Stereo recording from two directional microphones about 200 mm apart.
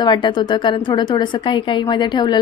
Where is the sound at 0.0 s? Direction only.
25° left (ahead or behind).